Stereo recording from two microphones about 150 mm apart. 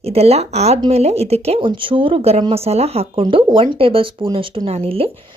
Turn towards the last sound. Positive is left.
turn(degrees=-40)  # may be behind; listen again after turning